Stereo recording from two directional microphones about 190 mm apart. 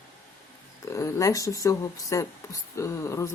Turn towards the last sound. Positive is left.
turn(degrees=15)  # may be behind; listen again after turning